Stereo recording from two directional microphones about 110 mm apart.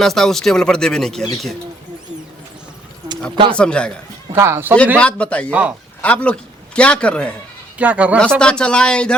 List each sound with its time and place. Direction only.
0.0 s speech: 5° left (ahead or behind)
3.5 s speech: 10° left (ahead or behind)
4.3 s a man's voice: 25° right (ahead or behind)
4.9 s speech: 10° left (ahead or behind)
5.5 s speech: 15° right (ahead or behind)
6.0 s a man's voice: 10° left (ahead or behind)
7.8 s speech: 10° right (ahead or behind)
8.4 s speech: 10° left (ahead or behind)